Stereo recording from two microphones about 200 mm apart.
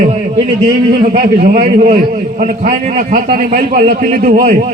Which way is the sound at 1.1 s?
50° right (ahead or behind).